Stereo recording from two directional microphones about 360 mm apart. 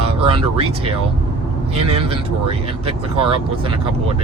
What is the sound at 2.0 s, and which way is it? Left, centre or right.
Speech, centre.